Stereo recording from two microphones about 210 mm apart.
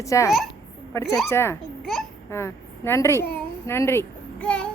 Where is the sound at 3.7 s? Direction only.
10° left (ahead or behind).